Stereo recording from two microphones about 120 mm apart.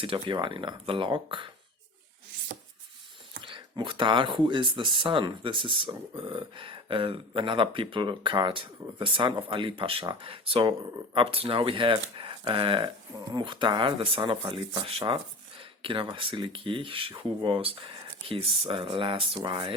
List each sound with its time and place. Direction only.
0.0 s speech: 45° right (ahead or behind)
3.4 s speech: 40° right (ahead or behind)
14.8 s speech: 50° right (ahead or behind)